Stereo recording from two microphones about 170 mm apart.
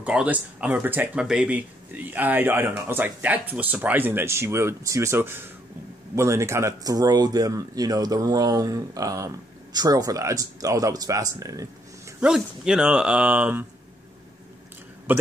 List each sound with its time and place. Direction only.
0.0 s speech: 5° right (ahead or behind)
12.2 s speech: 5° right (ahead or behind)
15.1 s speech: 10° right (ahead or behind)